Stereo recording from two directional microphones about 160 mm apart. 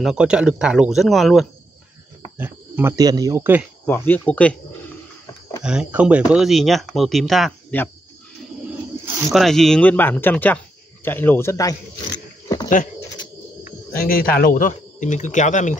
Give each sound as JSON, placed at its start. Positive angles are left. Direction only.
{"t": 0.0, "sound": "speech", "side_deg": -5}
{"t": 2.3, "sound": "speech", "side_deg": -10}
{"t": 3.8, "sound": "speech", "side_deg": 10}
{"t": 5.6, "sound": "speech", "side_deg": -5}
{"t": 9.3, "sound": "speech", "side_deg": 0}
{"t": 13.9, "sound": "speech", "side_deg": 65}